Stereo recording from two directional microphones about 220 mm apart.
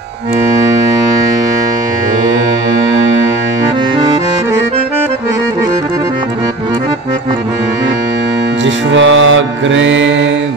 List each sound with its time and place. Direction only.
8.6 s music: 60° right (ahead or behind)